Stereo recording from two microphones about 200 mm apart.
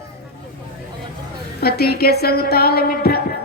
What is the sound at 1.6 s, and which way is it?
A woman's voice, 50° left (ahead or behind).